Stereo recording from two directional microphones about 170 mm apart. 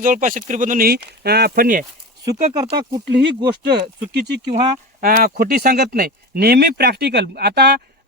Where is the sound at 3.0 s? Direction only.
80° right.